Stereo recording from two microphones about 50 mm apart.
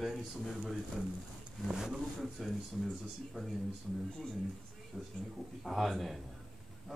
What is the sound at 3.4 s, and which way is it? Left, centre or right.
Speech, centre.